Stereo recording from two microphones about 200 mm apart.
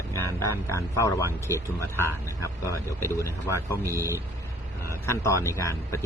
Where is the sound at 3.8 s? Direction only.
15° right (ahead or behind).